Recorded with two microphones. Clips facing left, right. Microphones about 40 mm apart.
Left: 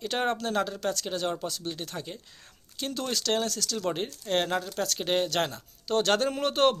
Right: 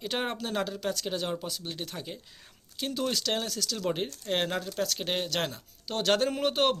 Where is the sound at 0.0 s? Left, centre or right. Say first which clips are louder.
Left 4 dB; centre.